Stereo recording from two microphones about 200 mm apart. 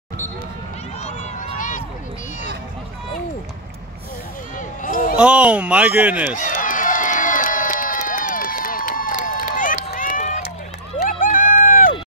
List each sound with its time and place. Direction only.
1.0 s run: 35° left (ahead or behind)
4.6 s a sound: 45° left (ahead or behind)
5.1 s speech: 5° right (ahead or behind)
6.3 s run: 40° left (ahead or behind)